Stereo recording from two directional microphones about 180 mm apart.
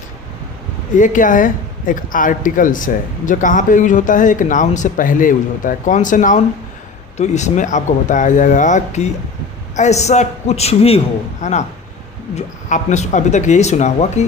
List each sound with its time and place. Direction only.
0.9 s speech: 45° left (ahead or behind)
12.6 s speech: 40° left (ahead or behind)